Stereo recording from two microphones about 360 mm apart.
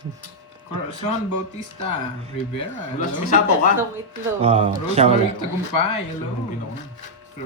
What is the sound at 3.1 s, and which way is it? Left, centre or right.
Speech, left.